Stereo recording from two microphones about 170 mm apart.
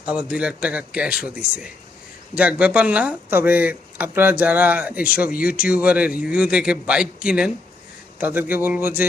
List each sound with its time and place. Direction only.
0.0 s speech: 5° right (ahead or behind)